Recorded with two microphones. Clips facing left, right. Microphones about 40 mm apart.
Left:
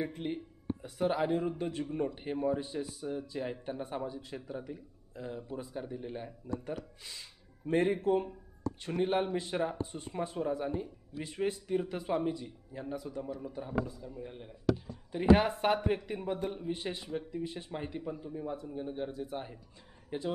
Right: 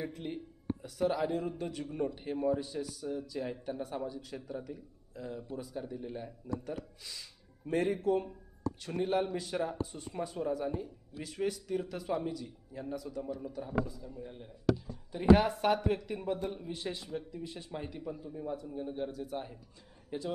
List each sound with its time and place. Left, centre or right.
0.0 s a man's voice: left
13.2 s a man's voice: centre
13.5 s a man's voice: left